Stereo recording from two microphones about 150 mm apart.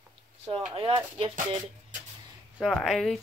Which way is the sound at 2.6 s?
Centre (ahead or behind).